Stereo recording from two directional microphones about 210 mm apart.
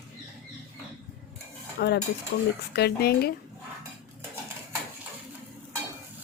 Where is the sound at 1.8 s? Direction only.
45° left (ahead or behind).